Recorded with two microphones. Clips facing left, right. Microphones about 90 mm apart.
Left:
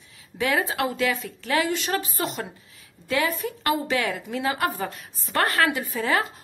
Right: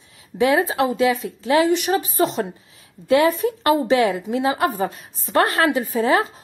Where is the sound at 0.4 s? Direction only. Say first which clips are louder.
Right 6 dB; 25° right (ahead or behind).